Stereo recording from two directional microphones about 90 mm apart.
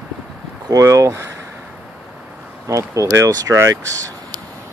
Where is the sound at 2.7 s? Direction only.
35° right (ahead or behind).